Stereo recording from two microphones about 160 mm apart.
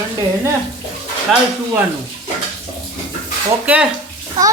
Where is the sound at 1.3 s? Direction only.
Centre (ahead or behind).